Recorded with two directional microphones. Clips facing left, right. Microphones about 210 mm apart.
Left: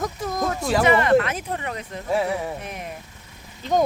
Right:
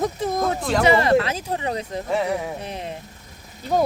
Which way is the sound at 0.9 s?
35° right (ahead or behind).